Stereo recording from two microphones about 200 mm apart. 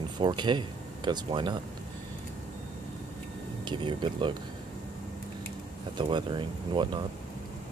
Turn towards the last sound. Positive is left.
turn(degrees=-25)  # may be behind; listen again after turning